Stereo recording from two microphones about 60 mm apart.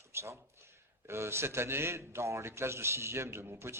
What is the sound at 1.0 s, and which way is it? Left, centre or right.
A man's voice, right.